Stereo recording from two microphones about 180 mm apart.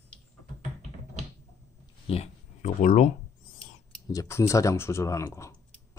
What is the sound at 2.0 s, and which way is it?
Speech, 35° left (ahead or behind).